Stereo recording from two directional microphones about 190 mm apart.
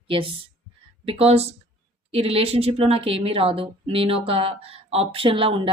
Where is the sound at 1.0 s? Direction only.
30° right (ahead or behind).